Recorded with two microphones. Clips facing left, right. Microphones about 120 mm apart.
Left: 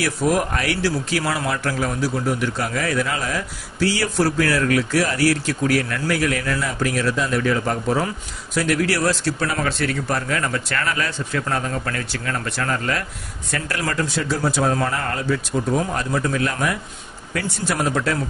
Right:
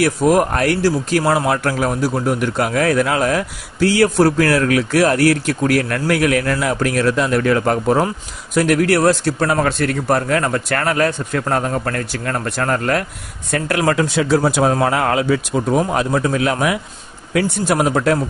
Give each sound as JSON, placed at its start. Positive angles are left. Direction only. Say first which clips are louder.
{"t": 0.0, "sound": "a man's voice", "louder": "right 6 dB", "side_deg": -55}
{"t": 13.9, "sound": "a man's voice", "louder": "right 7 dB", "side_deg": -70}
{"t": 17.3, "sound": "a man's voice", "louder": "right 8 dB", "side_deg": -60}